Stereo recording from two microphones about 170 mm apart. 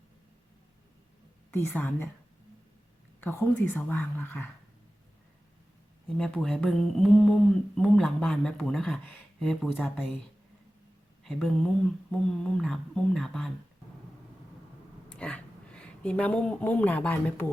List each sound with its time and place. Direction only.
1.5 s speech: 10° left (ahead or behind)
3.2 s speech: 10° left (ahead or behind)
6.1 s speech: 5° left (ahead or behind)
11.2 s speech: centre (ahead or behind)
15.1 s speech: 5° left (ahead or behind)